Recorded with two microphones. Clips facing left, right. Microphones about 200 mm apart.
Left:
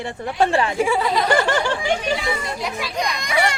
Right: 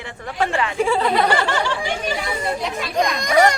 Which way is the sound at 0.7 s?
10° left (ahead or behind).